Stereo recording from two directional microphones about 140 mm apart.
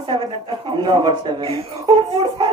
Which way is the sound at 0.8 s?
30° right (ahead or behind).